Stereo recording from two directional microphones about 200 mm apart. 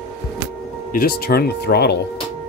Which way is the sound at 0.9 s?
50° left (ahead or behind).